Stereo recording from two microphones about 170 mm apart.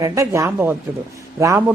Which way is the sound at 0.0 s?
15° right (ahead or behind).